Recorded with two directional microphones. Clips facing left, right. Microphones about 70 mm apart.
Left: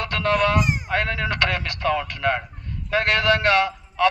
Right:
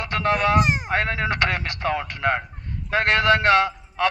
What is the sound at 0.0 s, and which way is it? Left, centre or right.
A man's voice, right.